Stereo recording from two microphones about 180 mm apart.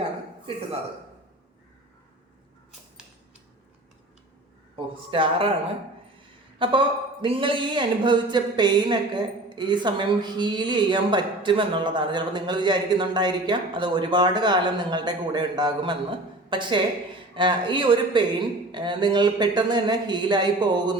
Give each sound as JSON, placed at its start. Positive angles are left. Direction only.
{"t": 5.1, "sound": "speech", "side_deg": -30}
{"t": 6.6, "sound": "speech", "side_deg": -25}